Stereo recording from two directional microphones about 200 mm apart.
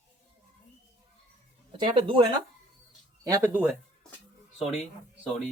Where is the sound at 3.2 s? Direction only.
15° right (ahead or behind).